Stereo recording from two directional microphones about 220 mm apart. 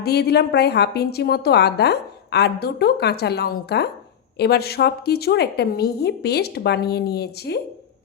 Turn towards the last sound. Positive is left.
turn(degrees=45)  # may be behind; listen again after turning